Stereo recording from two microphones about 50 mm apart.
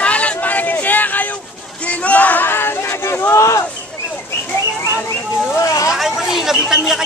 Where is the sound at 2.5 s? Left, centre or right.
Left.